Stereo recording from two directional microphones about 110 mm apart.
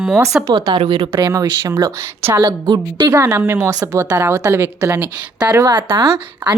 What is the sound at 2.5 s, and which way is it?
Speech, 40° right (ahead or behind).